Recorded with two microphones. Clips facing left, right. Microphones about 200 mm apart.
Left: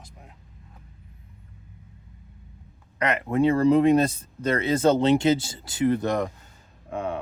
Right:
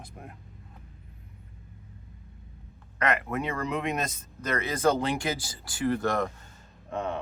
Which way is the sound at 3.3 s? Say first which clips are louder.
Left 12 dB; 30° left (ahead or behind).